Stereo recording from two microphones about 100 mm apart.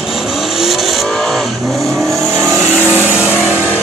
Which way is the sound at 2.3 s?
25° right (ahead or behind).